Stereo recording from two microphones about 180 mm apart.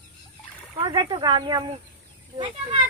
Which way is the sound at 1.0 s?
30° right (ahead or behind).